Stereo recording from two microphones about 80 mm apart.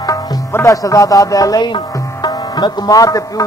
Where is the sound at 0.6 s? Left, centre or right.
Left.